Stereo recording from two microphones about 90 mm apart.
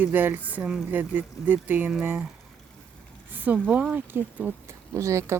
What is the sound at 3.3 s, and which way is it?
Speech, 20° right (ahead or behind).